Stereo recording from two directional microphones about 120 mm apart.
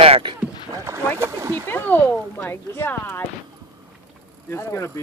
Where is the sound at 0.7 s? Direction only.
25° right (ahead or behind).